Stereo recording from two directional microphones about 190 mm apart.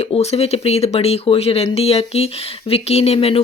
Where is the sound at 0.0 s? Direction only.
35° left (ahead or behind).